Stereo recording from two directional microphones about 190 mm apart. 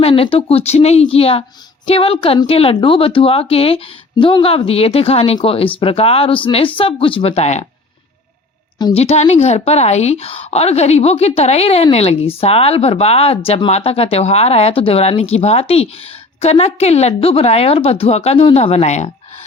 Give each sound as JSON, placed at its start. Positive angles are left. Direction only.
{"t": 0.0, "sound": "a woman's voice", "side_deg": 30}
{"t": 8.8, "sound": "a woman's voice", "side_deg": 30}